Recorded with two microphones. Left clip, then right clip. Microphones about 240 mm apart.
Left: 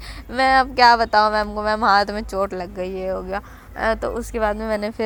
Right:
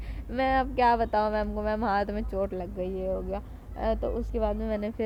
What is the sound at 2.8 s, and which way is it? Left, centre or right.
Speech, left.